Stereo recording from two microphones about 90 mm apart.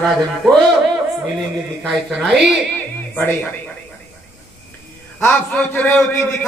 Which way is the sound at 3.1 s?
20° left (ahead or behind).